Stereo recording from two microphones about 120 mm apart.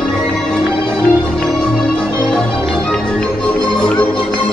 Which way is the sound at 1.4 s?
10° left (ahead or behind).